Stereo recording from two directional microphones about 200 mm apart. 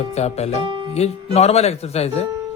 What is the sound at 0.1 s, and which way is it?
Speech, 35° left (ahead or behind).